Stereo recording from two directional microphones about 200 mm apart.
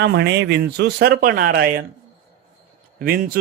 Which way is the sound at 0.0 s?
55° right (ahead or behind).